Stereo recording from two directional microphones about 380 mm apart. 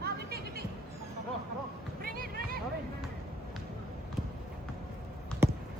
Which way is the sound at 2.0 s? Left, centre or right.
Right.